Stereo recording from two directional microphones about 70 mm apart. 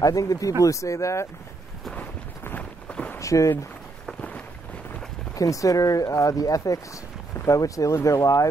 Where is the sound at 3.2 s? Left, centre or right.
Left.